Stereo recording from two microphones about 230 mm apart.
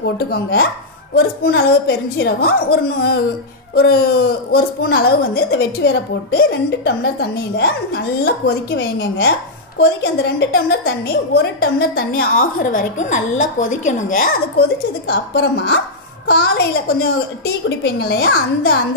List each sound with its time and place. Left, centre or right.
0.0 s a woman's voice: left
15.0 s a woman's voice: left